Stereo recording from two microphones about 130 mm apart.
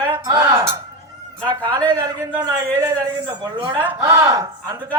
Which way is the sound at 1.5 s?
35° right (ahead or behind).